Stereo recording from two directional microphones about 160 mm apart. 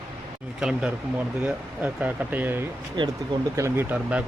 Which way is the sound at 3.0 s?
25° right (ahead or behind).